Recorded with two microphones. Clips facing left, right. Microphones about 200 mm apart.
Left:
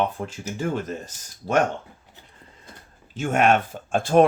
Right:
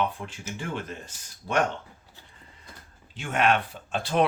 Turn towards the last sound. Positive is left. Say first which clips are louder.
# left 7 dB
turn(degrees=45)  # may be behind; listen again after turning